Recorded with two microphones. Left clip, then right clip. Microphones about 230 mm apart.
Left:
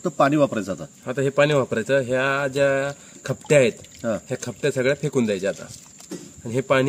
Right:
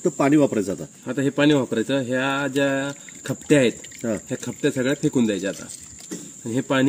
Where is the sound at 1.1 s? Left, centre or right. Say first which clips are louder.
Left 1 dB; left.